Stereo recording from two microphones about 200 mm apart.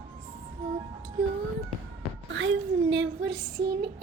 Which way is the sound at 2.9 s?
60° right (ahead or behind).